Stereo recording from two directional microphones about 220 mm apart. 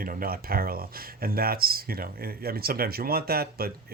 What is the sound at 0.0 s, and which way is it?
Speech, 40° right (ahead or behind).